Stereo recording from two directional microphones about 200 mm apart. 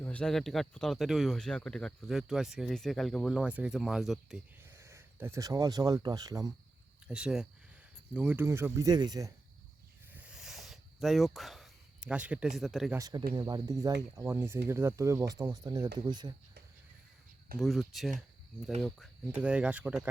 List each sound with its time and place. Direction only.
0.0 s speech: 5° left (ahead or behind)
4.6 s speech: 15° right (ahead or behind)
7.1 s speech: 5° right (ahead or behind)
10.2 s a sound: 5° right (ahead or behind)
13.0 s speech: 20° right (ahead or behind)
17.6 s speech: centre (ahead or behind)